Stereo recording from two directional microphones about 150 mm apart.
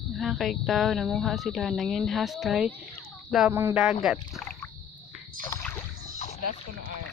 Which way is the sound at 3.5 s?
15° right (ahead or behind).